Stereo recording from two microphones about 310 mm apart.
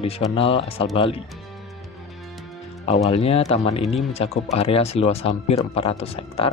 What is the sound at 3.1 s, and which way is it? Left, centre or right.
Speech, centre.